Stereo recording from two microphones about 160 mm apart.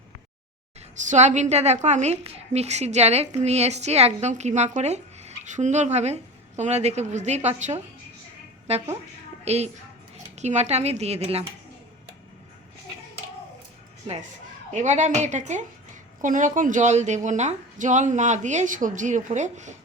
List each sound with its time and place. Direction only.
0.9 s a woman's voice: 50° right (ahead or behind)
14.7 s a woman's voice: 50° right (ahead or behind)